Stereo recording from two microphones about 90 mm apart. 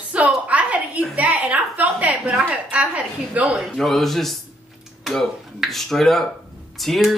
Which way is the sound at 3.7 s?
Centre (ahead or behind).